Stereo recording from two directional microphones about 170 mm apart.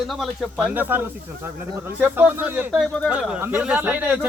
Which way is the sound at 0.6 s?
10° right (ahead or behind).